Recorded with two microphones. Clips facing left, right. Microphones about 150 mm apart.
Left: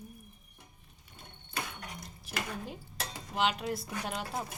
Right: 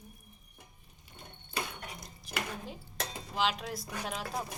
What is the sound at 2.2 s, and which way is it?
Speech, centre (ahead or behind).